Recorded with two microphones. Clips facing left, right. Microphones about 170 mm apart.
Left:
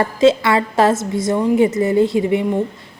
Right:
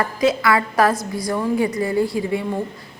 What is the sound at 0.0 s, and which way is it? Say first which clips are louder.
A woman's voice: left 5 dB; 25° left (ahead or behind).